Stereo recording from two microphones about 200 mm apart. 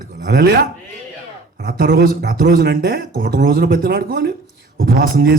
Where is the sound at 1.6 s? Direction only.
50° right (ahead or behind).